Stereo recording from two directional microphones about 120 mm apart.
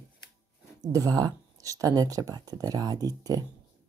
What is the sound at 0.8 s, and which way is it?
Speech, 35° right (ahead or behind).